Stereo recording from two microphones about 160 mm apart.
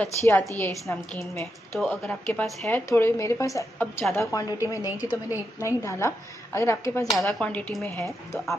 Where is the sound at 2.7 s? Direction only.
15° left (ahead or behind).